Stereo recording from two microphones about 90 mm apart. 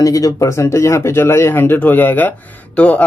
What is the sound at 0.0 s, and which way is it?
Speech, 40° left (ahead or behind).